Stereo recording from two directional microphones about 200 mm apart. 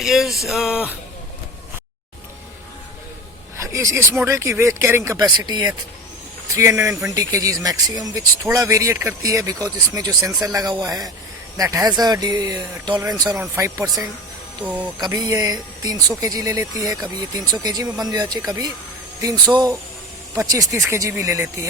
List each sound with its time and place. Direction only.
0.0 s speech: centre (ahead or behind)
3.6 s speech: 15° right (ahead or behind)
20.3 s speech: 15° right (ahead or behind)